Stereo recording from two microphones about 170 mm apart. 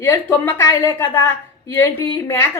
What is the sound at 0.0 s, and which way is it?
A woman's voice, 15° left (ahead or behind).